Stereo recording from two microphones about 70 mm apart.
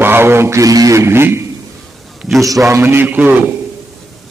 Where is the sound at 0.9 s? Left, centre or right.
Right.